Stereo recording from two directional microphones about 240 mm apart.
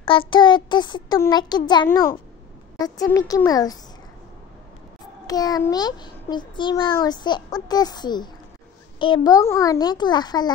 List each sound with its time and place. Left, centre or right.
0.0 s a child's voice: left
5.2 s a child's voice: centre